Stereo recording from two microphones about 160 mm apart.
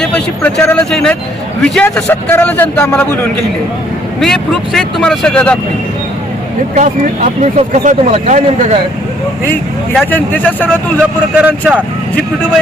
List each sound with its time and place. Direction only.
0.0 s a man's voice: 10° left (ahead or behind)
7.5 s speech: 45° right (ahead or behind)
10.1 s a man's voice: 10° left (ahead or behind)
11.3 s speech: 10° right (ahead or behind)